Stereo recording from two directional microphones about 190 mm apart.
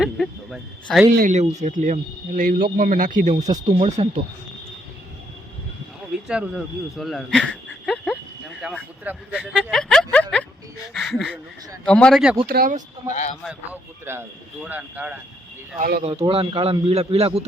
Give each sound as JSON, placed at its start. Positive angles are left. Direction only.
{"t": 0.0, "sound": "speech", "side_deg": 0}
{"t": 1.1, "sound": "speech", "side_deg": -45}
{"t": 3.8, "sound": "a man's voice", "side_deg": -35}
{"t": 6.2, "sound": "speech", "side_deg": -5}
{"t": 9.0, "sound": "a sound", "side_deg": -5}
{"t": 10.9, "sound": "speech", "side_deg": 0}
{"t": 12.5, "sound": "speech", "side_deg": -50}
{"t": 13.1, "sound": "speech", "side_deg": 40}
{"t": 14.0, "sound": "speech", "side_deg": -10}
{"t": 15.8, "sound": "speech", "side_deg": -50}
{"t": 16.0, "sound": "a man's voice", "side_deg": -30}